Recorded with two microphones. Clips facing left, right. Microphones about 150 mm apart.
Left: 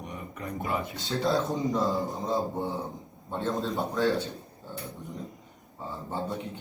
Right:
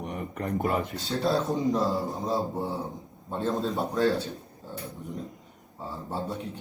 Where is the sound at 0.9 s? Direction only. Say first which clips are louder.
Right 1 dB; centre (ahead or behind).